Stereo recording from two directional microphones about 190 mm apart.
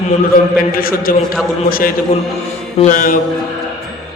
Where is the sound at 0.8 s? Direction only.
50° left (ahead or behind).